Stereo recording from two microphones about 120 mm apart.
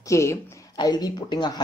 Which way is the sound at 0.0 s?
25° left (ahead or behind).